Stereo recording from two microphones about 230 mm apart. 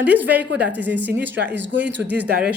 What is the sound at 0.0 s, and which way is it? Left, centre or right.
A woman's voice, centre.